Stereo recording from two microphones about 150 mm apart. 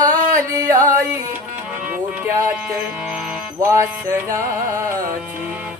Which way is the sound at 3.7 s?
20° right (ahead or behind).